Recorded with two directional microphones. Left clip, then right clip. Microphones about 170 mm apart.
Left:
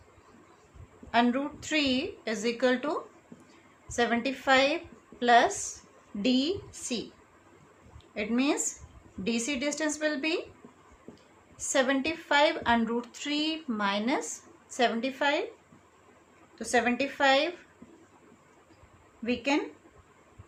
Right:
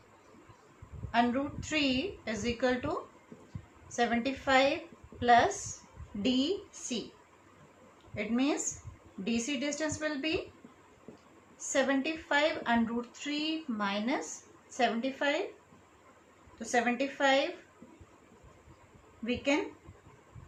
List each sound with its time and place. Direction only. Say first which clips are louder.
1.1 s a woman's voice: left 3 dB; 60° left (ahead or behind)
8.1 s a woman's voice: left 3 dB; 65° left (ahead or behind)
11.7 s a woman's voice: left 3 dB; 65° left (ahead or behind)
16.6 s a woman's voice: left 3 dB; 60° left (ahead or behind)
19.2 s a woman's voice: left 2 dB; 60° left (ahead or behind)